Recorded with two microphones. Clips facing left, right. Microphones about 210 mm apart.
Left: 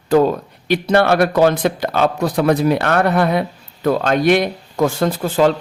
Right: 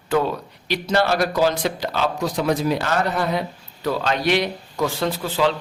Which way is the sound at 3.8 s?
50° left (ahead or behind).